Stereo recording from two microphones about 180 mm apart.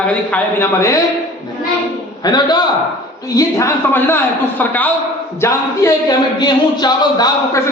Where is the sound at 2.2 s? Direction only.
20° left (ahead or behind).